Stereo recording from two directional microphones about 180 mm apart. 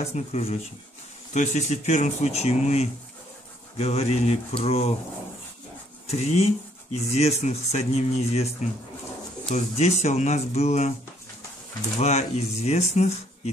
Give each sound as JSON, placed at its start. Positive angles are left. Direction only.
{"t": 0.0, "sound": "speech", "side_deg": 35}
{"t": 6.0, "sound": "speech", "side_deg": 35}
{"t": 9.5, "sound": "speech", "side_deg": 35}
{"t": 12.0, "sound": "speech", "side_deg": 40}